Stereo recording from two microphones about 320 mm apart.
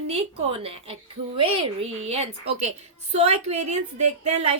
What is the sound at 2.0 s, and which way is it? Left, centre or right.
A woman's voice, centre.